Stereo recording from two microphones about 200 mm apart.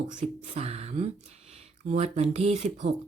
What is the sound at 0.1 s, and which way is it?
Speech, 35° right (ahead or behind).